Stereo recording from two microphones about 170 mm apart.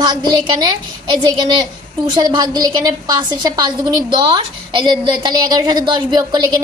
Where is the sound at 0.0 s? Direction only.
25° right (ahead or behind).